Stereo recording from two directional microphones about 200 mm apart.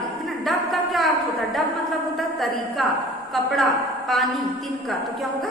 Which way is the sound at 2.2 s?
Centre (ahead or behind).